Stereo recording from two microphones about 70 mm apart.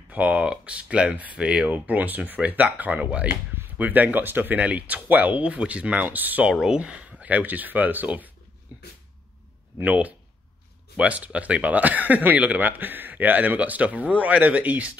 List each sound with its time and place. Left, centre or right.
0.1 s speech: centre
8.7 s a sound: right
9.8 s speech: right